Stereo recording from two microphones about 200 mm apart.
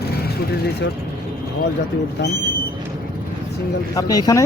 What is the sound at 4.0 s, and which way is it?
Speech, 20° left (ahead or behind).